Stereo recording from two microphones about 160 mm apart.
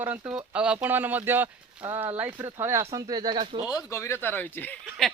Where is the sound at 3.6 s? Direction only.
20° left (ahead or behind).